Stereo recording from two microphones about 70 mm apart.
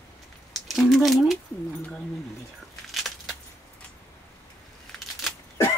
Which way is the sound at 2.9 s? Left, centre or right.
Centre.